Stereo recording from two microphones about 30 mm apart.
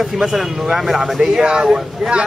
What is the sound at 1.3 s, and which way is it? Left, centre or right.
Speech, right.